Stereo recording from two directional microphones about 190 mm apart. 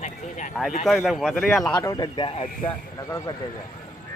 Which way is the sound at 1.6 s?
20° left (ahead or behind).